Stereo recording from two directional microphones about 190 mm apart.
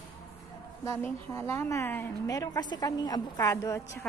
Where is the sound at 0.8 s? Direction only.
15° left (ahead or behind).